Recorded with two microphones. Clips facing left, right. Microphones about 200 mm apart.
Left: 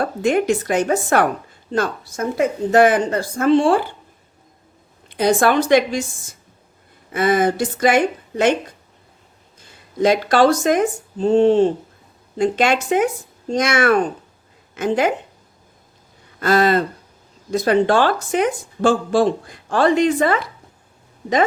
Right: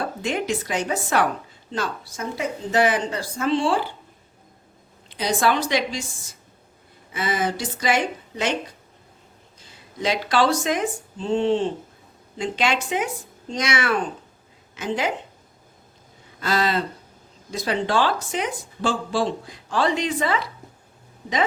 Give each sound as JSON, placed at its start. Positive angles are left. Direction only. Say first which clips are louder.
{"t": 0.0, "sound": "speech", "louder": "left 8 dB", "side_deg": 50}
{"t": 5.0, "sound": "speech", "louder": "left 6 dB", "side_deg": 55}
{"t": 9.6, "sound": "speech", "louder": "left 12 dB", "side_deg": 50}
{"t": 16.4, "sound": "speech", "louder": "left 7 dB", "side_deg": 50}